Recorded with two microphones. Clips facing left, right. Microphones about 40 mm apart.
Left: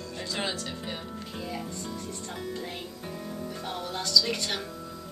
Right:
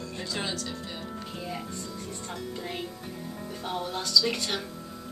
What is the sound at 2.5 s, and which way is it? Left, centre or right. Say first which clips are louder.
Speech: right 1 dB; centre.